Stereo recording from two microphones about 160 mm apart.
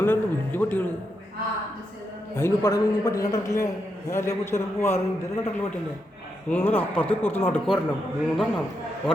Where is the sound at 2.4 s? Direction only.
15° left (ahead or behind).